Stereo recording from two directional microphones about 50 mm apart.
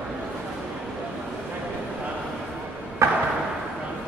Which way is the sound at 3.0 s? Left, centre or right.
Right.